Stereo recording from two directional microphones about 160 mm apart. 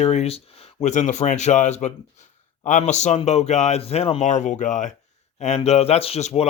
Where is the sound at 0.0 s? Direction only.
40° left (ahead or behind).